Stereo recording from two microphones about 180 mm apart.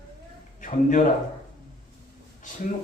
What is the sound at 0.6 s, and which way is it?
Speech, 45° left (ahead or behind).